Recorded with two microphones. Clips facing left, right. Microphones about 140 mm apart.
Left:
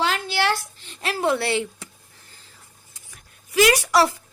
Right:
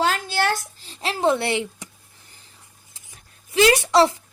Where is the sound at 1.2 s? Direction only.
20° right (ahead or behind).